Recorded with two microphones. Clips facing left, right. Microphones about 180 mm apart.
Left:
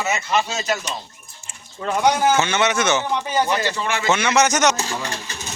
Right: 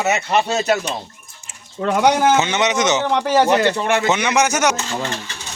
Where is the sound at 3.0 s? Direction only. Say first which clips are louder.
Right 6 dB; 75° right (ahead or behind); by 4.0 s 60° right (ahead or behind).